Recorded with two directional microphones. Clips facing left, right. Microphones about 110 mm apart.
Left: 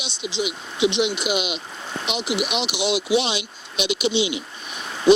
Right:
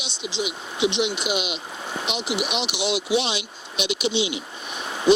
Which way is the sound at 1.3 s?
75° left (ahead or behind).